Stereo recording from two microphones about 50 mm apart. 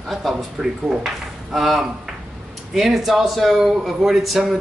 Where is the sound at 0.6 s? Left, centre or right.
Centre.